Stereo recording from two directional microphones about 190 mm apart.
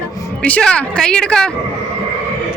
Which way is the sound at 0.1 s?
15° left (ahead or behind).